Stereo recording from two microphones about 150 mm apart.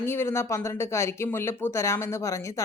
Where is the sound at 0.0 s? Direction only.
15° left (ahead or behind).